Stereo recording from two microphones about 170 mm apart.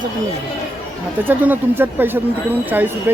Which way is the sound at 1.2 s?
10° right (ahead or behind).